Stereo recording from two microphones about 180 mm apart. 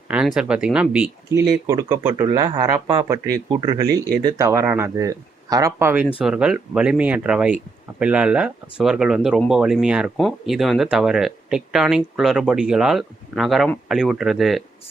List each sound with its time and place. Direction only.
0.1 s speech: 5° right (ahead or behind)